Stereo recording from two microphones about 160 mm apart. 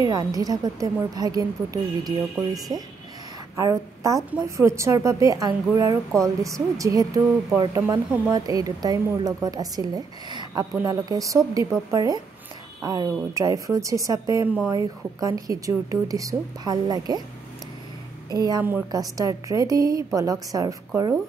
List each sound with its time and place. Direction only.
0.0 s speech: 25° right (ahead or behind)
18.3 s speech: 25° right (ahead or behind)
18.6 s a woman's voice: 10° right (ahead or behind)
18.9 s speech: 20° right (ahead or behind)